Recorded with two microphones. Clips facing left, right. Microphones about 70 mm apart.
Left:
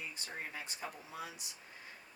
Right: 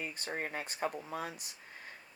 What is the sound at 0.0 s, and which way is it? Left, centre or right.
Speech, right.